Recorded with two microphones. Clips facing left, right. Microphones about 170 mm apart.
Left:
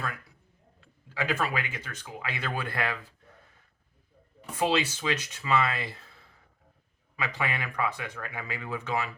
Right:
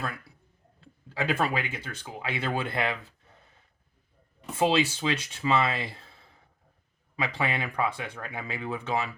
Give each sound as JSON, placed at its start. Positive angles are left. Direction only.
{"t": 1.1, "sound": "speech", "side_deg": -30}
{"t": 4.5, "sound": "speech", "side_deg": -25}
{"t": 7.2, "sound": "speech", "side_deg": -30}